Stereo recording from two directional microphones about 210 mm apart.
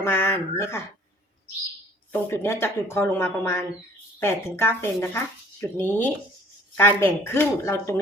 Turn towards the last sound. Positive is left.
turn(degrees=10)  # may be behind; listen again after turning